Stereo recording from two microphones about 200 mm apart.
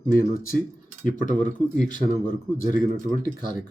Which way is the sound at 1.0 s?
40° left (ahead or behind).